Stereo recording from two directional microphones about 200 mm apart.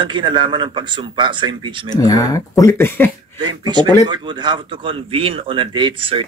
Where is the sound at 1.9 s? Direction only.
15° left (ahead or behind).